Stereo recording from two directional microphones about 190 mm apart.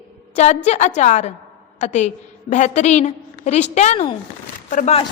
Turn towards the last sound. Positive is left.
turn(degrees=40)  # may be behind; listen again after turning